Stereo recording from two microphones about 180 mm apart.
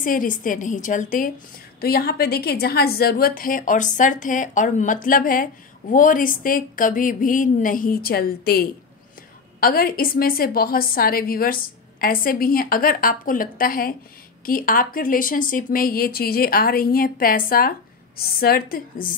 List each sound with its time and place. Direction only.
0.0 s a woman's voice: 50° left (ahead or behind)
1.8 s a woman's voice: 60° left (ahead or behind)